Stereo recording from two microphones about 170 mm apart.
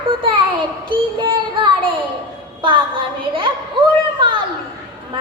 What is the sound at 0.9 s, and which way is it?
Child singing, 30° right (ahead or behind).